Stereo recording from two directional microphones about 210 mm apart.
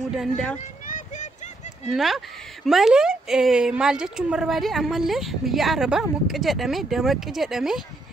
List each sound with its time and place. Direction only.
0.0 s speech: centre (ahead or behind)
0.8 s a sound: 35° left (ahead or behind)
1.9 s speech: centre (ahead or behind)